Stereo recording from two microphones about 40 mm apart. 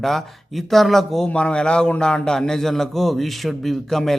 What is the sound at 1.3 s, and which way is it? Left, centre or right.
A man's voice, left.